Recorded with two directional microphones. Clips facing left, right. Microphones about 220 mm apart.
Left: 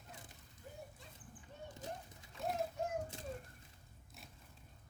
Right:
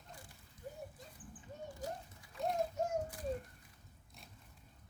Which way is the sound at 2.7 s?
40° right (ahead or behind).